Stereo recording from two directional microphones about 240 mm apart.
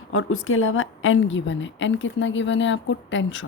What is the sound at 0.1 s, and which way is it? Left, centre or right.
A woman's voice, left.